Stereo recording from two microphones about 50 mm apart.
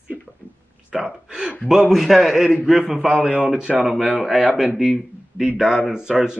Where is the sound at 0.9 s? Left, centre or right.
Centre.